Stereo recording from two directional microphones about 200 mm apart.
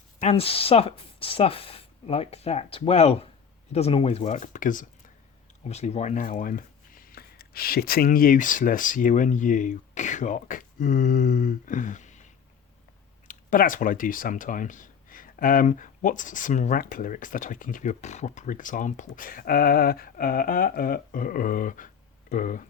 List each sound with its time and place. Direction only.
0.2 s speech: 30° left (ahead or behind)
13.2 s speech: 40° left (ahead or behind)